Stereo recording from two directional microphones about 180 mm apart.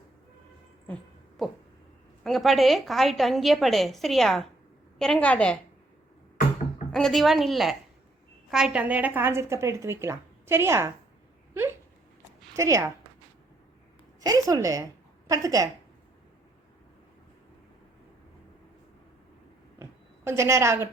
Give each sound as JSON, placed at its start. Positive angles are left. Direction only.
{"t": 1.4, "sound": "a woman's voice", "side_deg": 0}
{"t": 6.9, "sound": "a woman's voice", "side_deg": 0}
{"t": 12.5, "sound": "a woman's voice", "side_deg": -15}
{"t": 14.2, "sound": "a woman's voice", "side_deg": -20}
{"t": 19.8, "sound": "a sound", "side_deg": -15}